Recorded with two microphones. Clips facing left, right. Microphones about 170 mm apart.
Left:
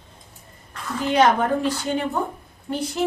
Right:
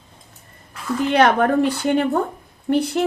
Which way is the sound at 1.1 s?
65° right (ahead or behind).